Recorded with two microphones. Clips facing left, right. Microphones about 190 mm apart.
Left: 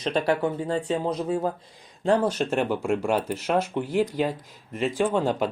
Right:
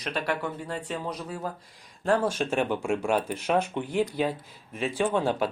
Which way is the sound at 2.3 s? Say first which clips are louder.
Left 2 dB; 10° right (ahead or behind).